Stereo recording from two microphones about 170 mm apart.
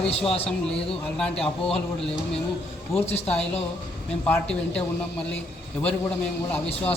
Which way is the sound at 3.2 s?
10° left (ahead or behind).